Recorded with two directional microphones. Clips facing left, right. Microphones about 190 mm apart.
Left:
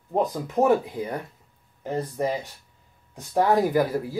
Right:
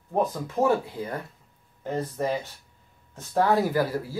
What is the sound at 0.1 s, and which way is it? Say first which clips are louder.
Speech: left 1 dB; 20° left (ahead or behind).